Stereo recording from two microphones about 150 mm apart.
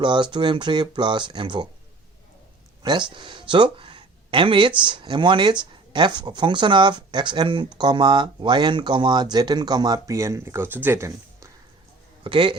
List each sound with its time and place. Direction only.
0.0 s speech: 30° right (ahead or behind)
2.8 s speech: 30° right (ahead or behind)
12.2 s speech: 35° right (ahead or behind)